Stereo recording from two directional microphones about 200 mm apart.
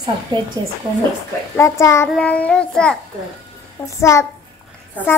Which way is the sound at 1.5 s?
15° left (ahead or behind).